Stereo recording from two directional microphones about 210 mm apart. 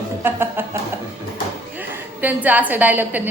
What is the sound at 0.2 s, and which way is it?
A woman's voice, 10° right (ahead or behind).